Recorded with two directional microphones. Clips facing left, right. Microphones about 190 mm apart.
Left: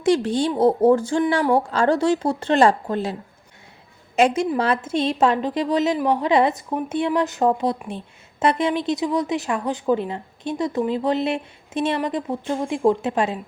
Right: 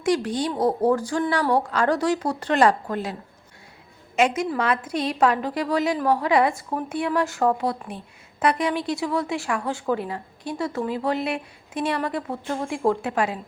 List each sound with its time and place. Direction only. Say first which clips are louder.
0.0 s a woman's voice: left 4 dB; 25° left (ahead or behind)